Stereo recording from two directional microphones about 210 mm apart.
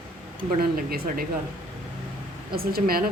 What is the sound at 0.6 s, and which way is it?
Speech, 45° right (ahead or behind).